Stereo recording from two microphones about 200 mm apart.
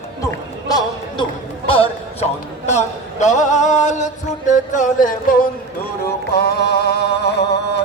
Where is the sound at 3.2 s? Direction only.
35° left (ahead or behind).